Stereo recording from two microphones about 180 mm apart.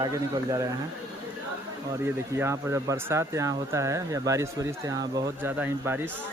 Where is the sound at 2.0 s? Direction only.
15° right (ahead or behind).